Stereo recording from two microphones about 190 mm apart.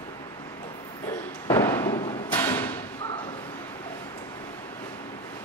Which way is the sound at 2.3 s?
10° left (ahead or behind).